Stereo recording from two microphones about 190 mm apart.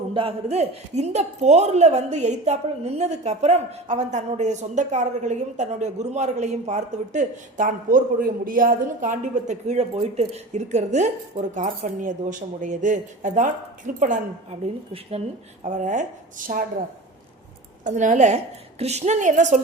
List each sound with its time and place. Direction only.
0.1 s a man's voice: 30° right (ahead or behind); by 16.6 s 45° right (ahead or behind)
17.8 s a man's voice: 40° right (ahead or behind)